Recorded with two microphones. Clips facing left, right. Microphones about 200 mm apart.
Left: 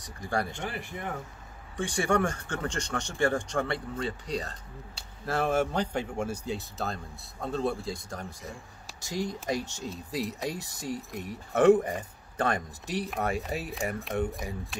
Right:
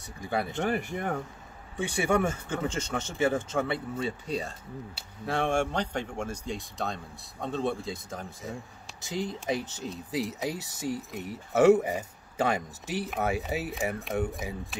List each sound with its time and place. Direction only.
0.0 s speech: 5° right (ahead or behind)
0.6 s speech: 50° right (ahead or behind)
1.8 s speech: 5° right (ahead or behind)